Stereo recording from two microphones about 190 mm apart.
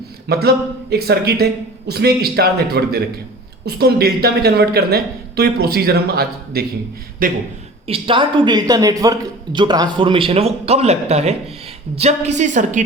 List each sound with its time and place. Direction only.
0.3 s a woman's voice: 55° right (ahead or behind)
7.9 s a woman's voice: 30° right (ahead or behind)